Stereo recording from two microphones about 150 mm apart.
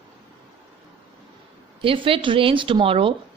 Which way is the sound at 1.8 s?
35° right (ahead or behind).